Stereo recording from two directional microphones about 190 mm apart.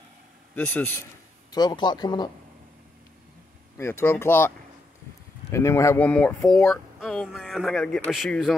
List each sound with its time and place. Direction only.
0.6 s speech: 10° left (ahead or behind)
1.5 s speech: 20° left (ahead or behind)
3.7 s speech: 15° left (ahead or behind)
5.5 s speech: 15° left (ahead or behind)